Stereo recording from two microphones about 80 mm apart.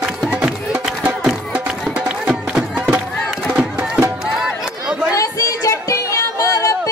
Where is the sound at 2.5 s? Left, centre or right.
Centre.